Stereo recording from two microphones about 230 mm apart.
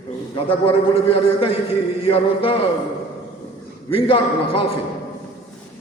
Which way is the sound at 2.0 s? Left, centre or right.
Left.